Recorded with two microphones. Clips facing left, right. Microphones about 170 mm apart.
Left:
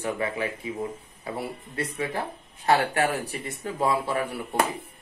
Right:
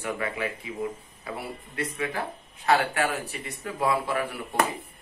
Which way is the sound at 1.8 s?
30° left (ahead or behind).